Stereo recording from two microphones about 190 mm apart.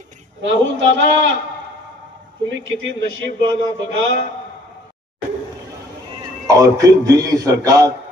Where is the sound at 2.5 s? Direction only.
80° right.